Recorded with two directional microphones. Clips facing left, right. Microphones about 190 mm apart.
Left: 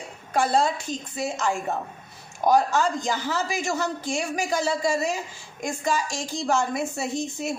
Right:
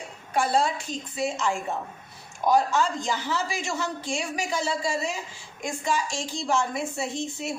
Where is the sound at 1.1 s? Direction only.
45° left (ahead or behind).